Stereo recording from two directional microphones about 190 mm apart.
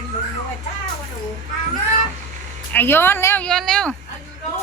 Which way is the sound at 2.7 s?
10° left (ahead or behind).